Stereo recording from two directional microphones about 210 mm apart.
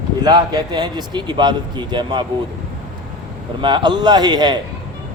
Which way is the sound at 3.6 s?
20° right (ahead or behind).